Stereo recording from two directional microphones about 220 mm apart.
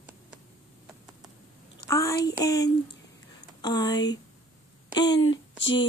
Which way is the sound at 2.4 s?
15° left (ahead or behind).